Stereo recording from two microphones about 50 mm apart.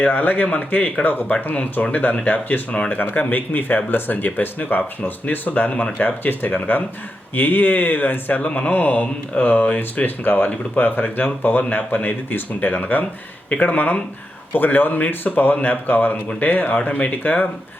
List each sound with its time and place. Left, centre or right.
0.0 s speech: left
8.4 s speech: left
8.7 s speech: left